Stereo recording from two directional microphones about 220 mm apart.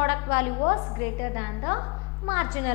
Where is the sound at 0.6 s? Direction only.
20° left (ahead or behind).